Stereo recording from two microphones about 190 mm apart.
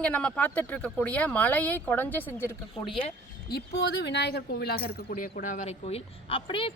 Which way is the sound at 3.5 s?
60° left (ahead or behind).